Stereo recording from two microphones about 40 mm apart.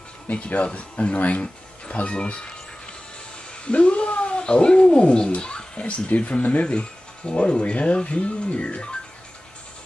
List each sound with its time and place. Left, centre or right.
0.3 s speech: left
3.6 s speech: left